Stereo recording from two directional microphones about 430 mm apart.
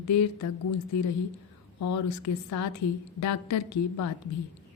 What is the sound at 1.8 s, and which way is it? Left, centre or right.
A woman's voice, left.